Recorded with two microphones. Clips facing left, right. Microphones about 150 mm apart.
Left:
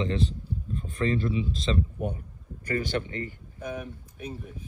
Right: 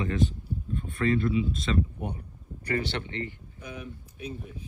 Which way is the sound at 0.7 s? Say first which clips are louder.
Right 1 dB; 35° left (ahead or behind).